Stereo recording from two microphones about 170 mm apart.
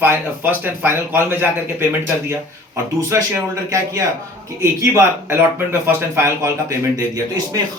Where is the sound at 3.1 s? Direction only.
15° right (ahead or behind).